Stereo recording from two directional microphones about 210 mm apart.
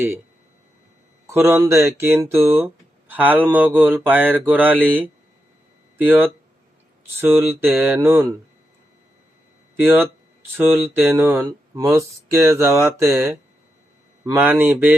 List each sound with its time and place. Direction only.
1.3 s speech: 10° right (ahead or behind)
9.7 s speech: 10° right (ahead or behind)